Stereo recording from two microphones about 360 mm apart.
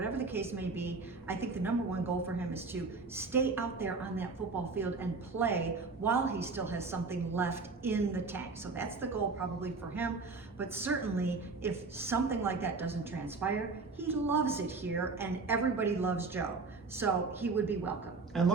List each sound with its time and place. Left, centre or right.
0.0 s a woman's voice: centre